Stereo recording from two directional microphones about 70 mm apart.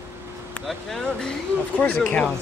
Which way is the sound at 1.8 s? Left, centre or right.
Centre.